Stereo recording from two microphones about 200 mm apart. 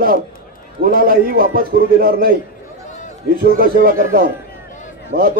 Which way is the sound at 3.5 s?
45° right (ahead or behind).